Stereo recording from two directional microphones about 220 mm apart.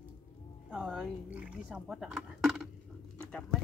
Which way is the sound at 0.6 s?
Centre (ahead or behind).